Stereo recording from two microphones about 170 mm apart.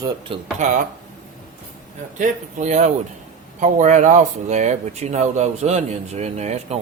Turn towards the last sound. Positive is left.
turn(degrees=-40)  # may be behind; listen again after turning